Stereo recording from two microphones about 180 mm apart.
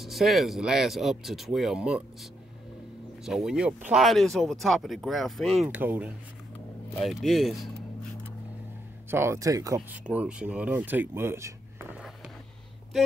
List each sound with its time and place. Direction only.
0.0 s speech: centre (ahead or behind)
3.3 s speech: 5° right (ahead or behind)
9.1 s speech: 15° right (ahead or behind)
9.8 s speech: 5° right (ahead or behind)